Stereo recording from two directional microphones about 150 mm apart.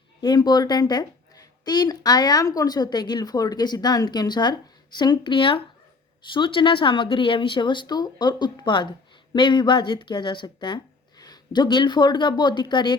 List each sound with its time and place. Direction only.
0.2 s a woman's voice: 30° left (ahead or behind)